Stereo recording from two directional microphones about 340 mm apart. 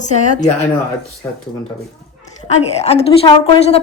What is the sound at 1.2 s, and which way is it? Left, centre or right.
Speech, centre.